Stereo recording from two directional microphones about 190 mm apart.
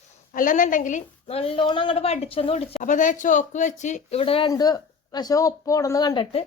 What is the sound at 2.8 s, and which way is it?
Speech, 40° left (ahead or behind).